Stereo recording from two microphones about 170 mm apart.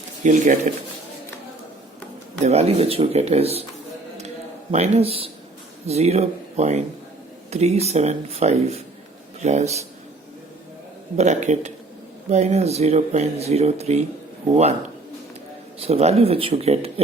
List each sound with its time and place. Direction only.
0.3 s a man's voice: 45° right (ahead or behind)
2.4 s speech: 40° right (ahead or behind)
4.7 s speech: 40° right (ahead or behind)
11.2 s a man's voice: 45° right (ahead or behind)
15.8 s speech: 40° right (ahead or behind)